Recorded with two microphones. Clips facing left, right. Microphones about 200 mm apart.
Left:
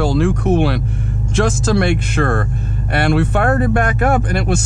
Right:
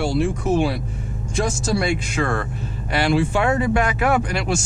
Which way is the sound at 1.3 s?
85° left.